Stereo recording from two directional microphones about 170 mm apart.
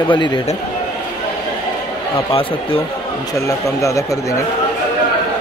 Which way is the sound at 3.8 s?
20° left (ahead or behind).